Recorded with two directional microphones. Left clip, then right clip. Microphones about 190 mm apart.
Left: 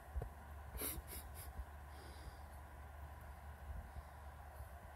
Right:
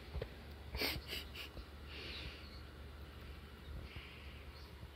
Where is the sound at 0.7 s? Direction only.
20° left (ahead or behind).